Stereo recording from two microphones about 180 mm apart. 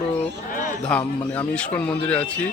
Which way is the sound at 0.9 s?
5° left (ahead or behind).